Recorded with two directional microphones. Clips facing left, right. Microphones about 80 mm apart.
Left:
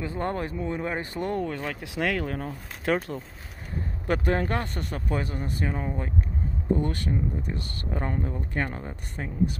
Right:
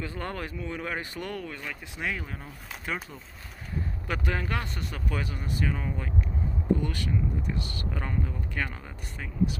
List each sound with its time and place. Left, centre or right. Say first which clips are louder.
0.0 s speech: left 5 dB; left
2.0 s speech: left 7 dB; left
4.1 s speech: left 6 dB; left